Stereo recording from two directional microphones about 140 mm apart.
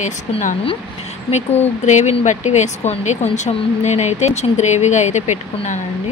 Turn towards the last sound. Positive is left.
turn(degrees=60)  # may be behind; listen again after turning